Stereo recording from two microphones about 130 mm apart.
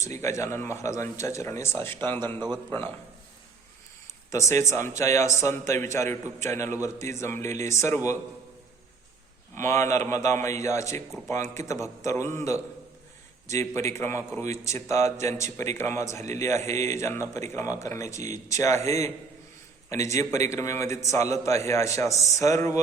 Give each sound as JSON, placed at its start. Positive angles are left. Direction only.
{"t": 0.0, "sound": "speech", "side_deg": 25}
{"t": 4.3, "sound": "speech", "side_deg": 20}
{"t": 9.6, "sound": "speech", "side_deg": 20}